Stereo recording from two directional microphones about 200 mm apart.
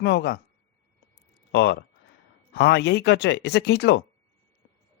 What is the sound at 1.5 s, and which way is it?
Speech, 60° left (ahead or behind).